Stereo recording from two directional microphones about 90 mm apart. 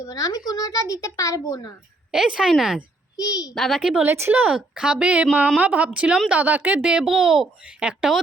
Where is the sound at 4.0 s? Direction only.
25° right (ahead or behind).